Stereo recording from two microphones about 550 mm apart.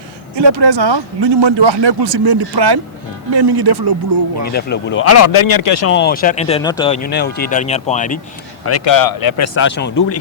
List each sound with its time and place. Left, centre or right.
0.3 s speech: right
4.5 s speech: centre
8.6 s speech: left
9.6 s speech: centre